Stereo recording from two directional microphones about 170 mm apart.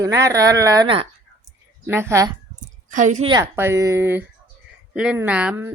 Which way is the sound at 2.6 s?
45° right (ahead or behind).